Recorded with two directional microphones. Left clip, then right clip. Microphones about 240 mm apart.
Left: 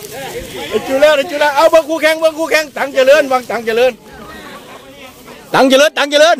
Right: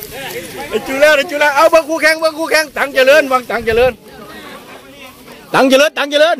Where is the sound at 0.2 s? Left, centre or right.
Right; by 2.6 s centre.